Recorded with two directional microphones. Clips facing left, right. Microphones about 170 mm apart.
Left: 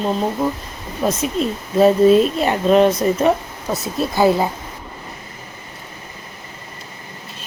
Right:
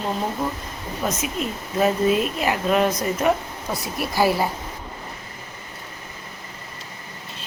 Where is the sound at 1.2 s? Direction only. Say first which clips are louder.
Left 6 dB; 30° left (ahead or behind).